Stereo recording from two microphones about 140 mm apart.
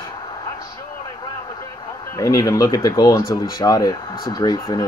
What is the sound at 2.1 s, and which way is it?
Speech, 25° left (ahead or behind).